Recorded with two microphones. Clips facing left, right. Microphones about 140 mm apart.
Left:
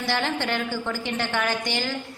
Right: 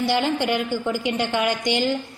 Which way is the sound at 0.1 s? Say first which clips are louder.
Right 1 dB; 15° right (ahead or behind).